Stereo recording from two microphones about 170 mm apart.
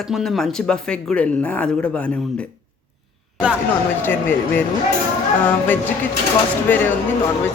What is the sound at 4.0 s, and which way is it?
Speech, 10° left (ahead or behind).